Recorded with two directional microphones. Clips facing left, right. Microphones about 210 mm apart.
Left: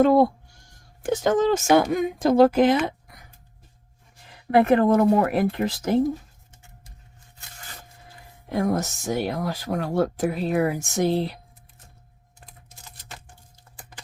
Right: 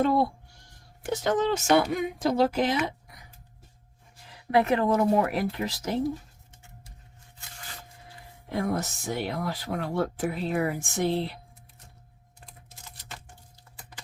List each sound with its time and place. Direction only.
0.0 s speech: 45° left (ahead or behind)
4.5 s speech: 55° left (ahead or behind)
8.4 s speech: 45° left (ahead or behind)